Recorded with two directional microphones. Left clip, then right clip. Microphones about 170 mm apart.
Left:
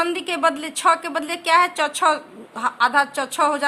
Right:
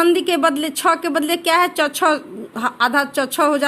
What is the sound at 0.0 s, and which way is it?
A woman's voice, 20° right (ahead or behind).